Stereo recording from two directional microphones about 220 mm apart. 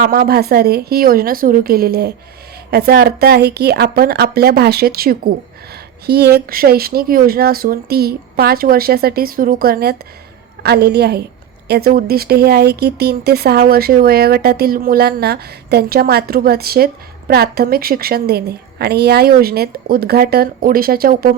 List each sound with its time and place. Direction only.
0.0 s speech: 40° right (ahead or behind)